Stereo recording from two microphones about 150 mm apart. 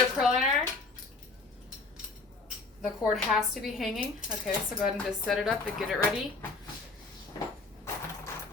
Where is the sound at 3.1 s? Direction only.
Centre (ahead or behind).